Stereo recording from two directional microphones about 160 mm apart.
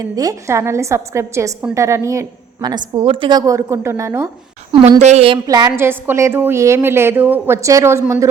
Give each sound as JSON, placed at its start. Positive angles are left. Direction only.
{"t": 0.0, "sound": "a woman's voice", "side_deg": -20}
{"t": 4.8, "sound": "speech", "side_deg": -45}
{"t": 5.5, "sound": "a woman's voice", "side_deg": -20}